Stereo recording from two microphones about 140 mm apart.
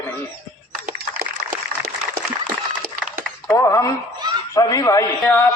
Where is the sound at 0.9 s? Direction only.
85° right.